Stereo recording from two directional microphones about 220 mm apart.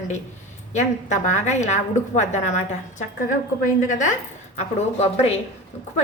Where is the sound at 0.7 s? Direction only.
30° left (ahead or behind).